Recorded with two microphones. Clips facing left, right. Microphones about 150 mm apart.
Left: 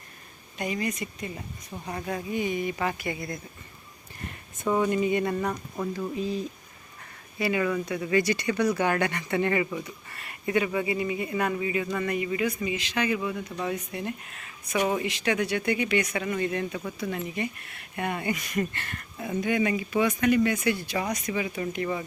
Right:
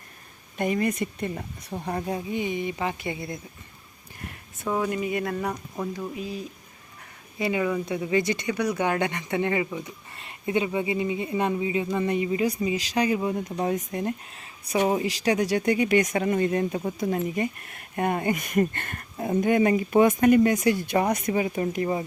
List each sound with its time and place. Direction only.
0.5 s speech: 50° right (ahead or behind)
2.1 s speech: 20° right (ahead or behind)
4.6 s speech: 5° right (ahead or behind)
7.3 s speech: 20° right (ahead or behind); by 14.1 s 45° right (ahead or behind)
14.3 s speech: 30° right (ahead or behind); by 21.4 s 55° right (ahead or behind)
21.4 s speech: 40° right (ahead or behind)